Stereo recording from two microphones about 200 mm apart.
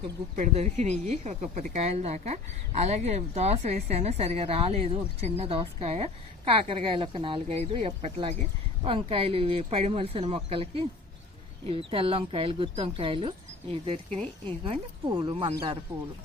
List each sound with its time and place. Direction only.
0.3 s speech: 35° right (ahead or behind)